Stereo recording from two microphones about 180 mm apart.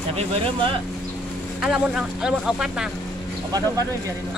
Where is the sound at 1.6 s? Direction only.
5° right (ahead or behind).